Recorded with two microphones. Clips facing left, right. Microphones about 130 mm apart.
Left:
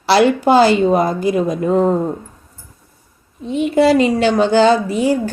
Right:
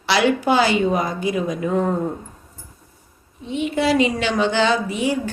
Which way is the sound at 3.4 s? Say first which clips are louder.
Left 7 dB; 40° left (ahead or behind).